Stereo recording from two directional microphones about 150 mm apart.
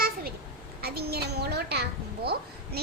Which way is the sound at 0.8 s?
90° right.